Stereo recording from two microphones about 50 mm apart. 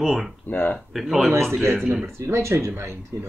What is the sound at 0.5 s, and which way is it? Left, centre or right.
Speech, left.